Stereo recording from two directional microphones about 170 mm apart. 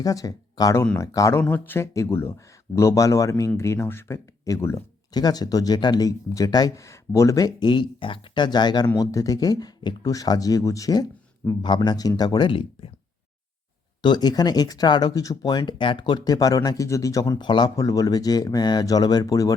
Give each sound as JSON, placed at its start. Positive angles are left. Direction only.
{"t": 0.0, "sound": "speech", "side_deg": 20}
{"t": 14.0, "sound": "speech", "side_deg": 25}